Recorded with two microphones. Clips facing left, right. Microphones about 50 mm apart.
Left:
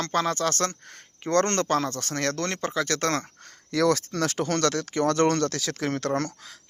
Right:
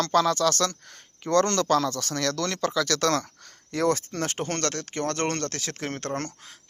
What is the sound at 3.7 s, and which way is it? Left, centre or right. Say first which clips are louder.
Speech: left 2 dB; left.